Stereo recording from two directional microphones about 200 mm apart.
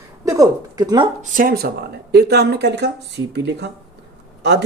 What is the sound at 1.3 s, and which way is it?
Speech, 45° right (ahead or behind).